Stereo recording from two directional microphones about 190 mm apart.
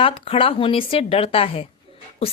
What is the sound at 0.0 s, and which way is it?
A woman's voice, 30° left (ahead or behind).